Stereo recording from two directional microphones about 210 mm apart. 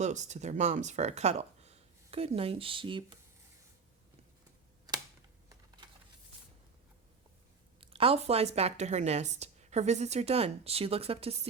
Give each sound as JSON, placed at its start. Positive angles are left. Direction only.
{"t": 0.0, "sound": "speech", "side_deg": -35}
{"t": 5.5, "sound": "typing", "side_deg": -20}
{"t": 7.8, "sound": "speech", "side_deg": -25}